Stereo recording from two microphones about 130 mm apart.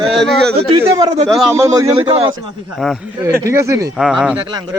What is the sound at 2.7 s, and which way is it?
Speech, centre (ahead or behind).